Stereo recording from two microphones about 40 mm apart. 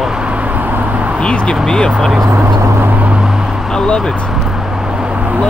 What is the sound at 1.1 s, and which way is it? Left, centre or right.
Speech, left.